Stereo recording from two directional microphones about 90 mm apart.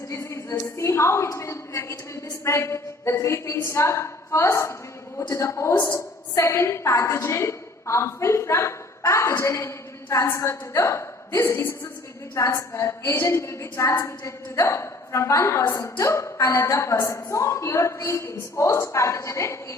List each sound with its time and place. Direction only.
0.1 s a woman's voice: 30° left (ahead or behind)
5.7 s a woman's voice: 20° left (ahead or behind)
6.3 s a woman's voice: 35° left (ahead or behind)